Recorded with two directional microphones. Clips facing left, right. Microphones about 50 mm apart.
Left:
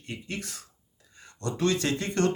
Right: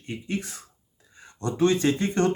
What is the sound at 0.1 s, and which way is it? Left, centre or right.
Speech, right.